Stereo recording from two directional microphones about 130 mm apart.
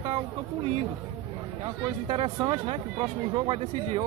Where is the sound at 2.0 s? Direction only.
45° right (ahead or behind).